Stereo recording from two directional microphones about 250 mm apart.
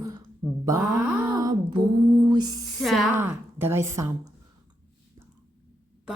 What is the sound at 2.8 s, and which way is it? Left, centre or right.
A woman's voice, centre.